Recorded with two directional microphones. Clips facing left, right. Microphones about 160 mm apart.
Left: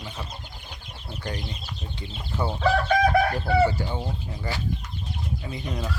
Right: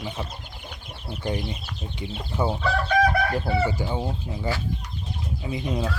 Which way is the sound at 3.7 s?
15° right (ahead or behind).